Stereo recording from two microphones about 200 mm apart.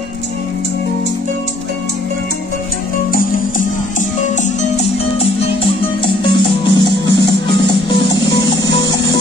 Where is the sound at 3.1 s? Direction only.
45° left (ahead or behind).